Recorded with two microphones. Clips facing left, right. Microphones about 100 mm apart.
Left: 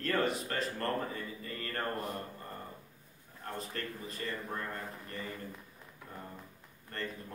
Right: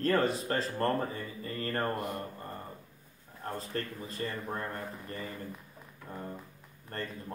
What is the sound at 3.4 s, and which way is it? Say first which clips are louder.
Speech: right 4 dB; 30° right (ahead or behind).